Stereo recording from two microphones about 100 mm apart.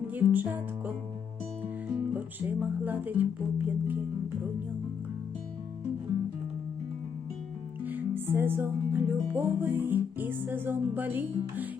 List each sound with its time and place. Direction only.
0.1 s music: 20° right (ahead or behind)
1.9 s speech: 15° right (ahead or behind)
3.7 s music: 20° right (ahead or behind)
7.9 s music: 20° right (ahead or behind)